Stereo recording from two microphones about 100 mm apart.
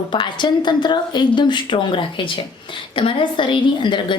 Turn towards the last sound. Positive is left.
turn(degrees=50)  # may be behind; listen again after turning